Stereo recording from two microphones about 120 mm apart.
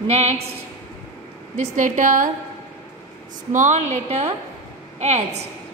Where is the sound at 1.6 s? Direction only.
90° right.